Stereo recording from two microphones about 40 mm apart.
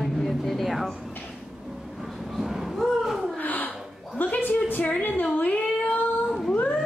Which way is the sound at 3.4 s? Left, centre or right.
Left.